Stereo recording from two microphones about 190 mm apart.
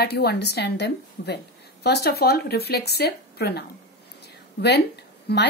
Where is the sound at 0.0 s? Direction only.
55° left (ahead or behind).